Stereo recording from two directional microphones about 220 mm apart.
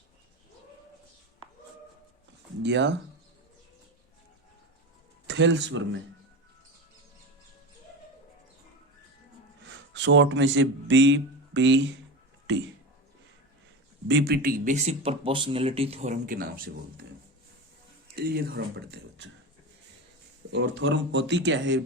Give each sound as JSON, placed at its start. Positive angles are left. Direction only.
{"t": 2.6, "sound": "speech", "side_deg": -55}
{"t": 5.3, "sound": "speech", "side_deg": -55}
{"t": 9.6, "sound": "a man's voice", "side_deg": -55}
{"t": 14.1, "sound": "speech", "side_deg": -50}
{"t": 18.1, "sound": "speech", "side_deg": -45}
{"t": 20.5, "sound": "speech", "side_deg": -55}